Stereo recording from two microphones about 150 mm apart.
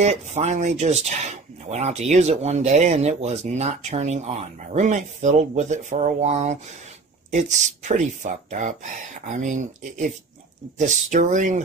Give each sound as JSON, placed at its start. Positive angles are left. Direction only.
{"t": 0.0, "sound": "speech", "side_deg": -50}